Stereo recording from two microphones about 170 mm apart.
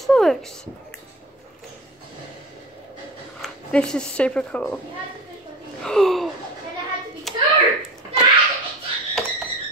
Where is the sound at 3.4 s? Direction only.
5° left (ahead or behind).